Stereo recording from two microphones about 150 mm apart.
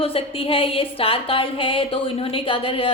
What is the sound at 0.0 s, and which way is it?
A woman's voice, 40° left (ahead or behind).